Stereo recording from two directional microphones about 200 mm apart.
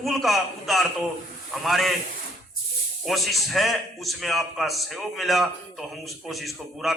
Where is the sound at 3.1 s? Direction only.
Centre (ahead or behind).